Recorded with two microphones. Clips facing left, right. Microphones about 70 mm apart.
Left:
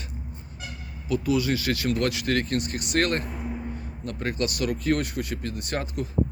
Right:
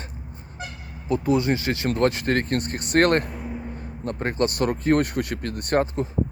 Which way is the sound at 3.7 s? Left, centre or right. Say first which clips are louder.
Right 4 dB; right.